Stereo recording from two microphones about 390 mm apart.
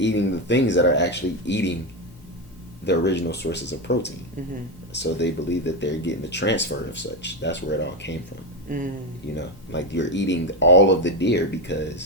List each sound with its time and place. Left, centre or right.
0.0 s speech: left
2.8 s speech: left
8.7 s speech: right
9.2 s speech: left